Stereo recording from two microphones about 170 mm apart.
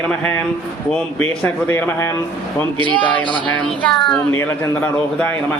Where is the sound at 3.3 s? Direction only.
30° right (ahead or behind).